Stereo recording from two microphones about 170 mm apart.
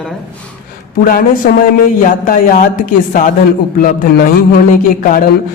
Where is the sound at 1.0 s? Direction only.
55° left (ahead or behind).